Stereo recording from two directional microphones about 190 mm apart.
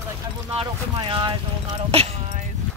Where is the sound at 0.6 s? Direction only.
25° right (ahead or behind).